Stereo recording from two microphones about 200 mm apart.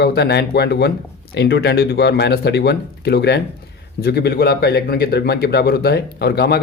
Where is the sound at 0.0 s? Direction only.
55° left (ahead or behind).